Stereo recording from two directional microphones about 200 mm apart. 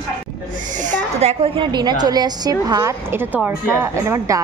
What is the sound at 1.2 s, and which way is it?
A woman's voice, 30° right (ahead or behind).